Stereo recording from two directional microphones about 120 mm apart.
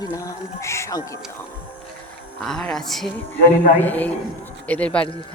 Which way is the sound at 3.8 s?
15° left (ahead or behind).